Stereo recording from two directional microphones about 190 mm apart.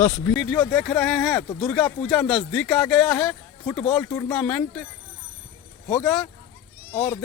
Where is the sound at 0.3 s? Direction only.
Centre (ahead or behind).